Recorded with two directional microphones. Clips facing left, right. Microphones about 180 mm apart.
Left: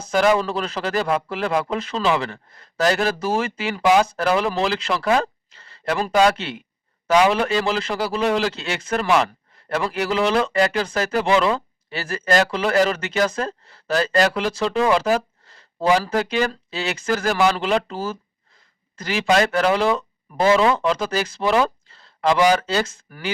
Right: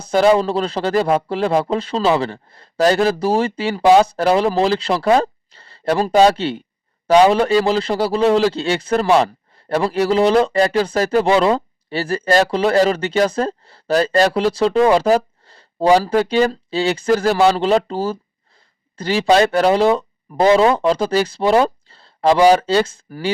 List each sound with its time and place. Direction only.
0.0 s speech: 30° right (ahead or behind)